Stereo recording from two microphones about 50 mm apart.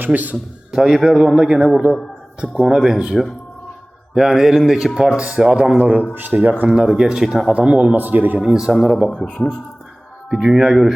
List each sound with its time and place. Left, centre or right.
0.0 s speech: right
0.7 s music: centre
1.4 s speech: centre
2.5 s music: centre
4.9 s speech: right
6.1 s speech: right
6.7 s music: centre
7.5 s speech: right
7.9 s speech: right
8.4 s music: centre
8.7 s speech: centre
9.1 s speech: centre
10.2 s music: centre